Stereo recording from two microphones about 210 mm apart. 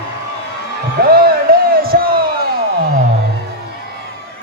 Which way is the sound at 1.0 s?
45° right (ahead or behind).